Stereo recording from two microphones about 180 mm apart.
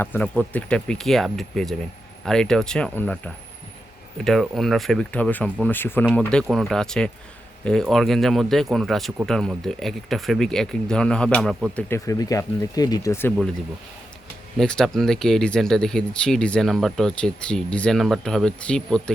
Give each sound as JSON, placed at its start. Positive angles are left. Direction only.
{"t": 0.0, "sound": "speech", "side_deg": 10}
{"t": 11.9, "sound": "speech", "side_deg": 15}
{"t": 14.6, "sound": "speech", "side_deg": 5}